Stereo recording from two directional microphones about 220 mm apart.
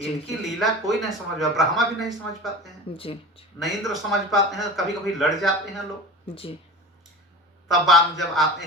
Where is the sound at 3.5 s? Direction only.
Centre (ahead or behind).